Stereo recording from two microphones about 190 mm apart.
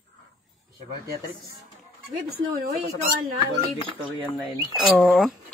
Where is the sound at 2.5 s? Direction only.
50° right (ahead or behind).